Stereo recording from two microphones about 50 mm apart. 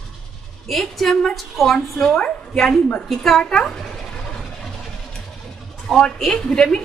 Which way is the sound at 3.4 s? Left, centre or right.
Centre.